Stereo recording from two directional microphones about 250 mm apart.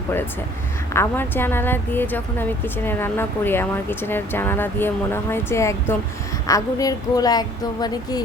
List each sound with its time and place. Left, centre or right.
0.9 s a woman's voice: centre